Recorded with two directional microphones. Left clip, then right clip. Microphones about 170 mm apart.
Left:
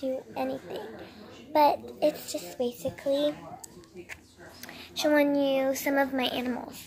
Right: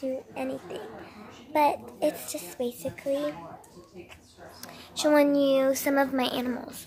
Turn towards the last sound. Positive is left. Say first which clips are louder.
# right 1 dB
turn(degrees=-15)  # may be behind; listen again after turning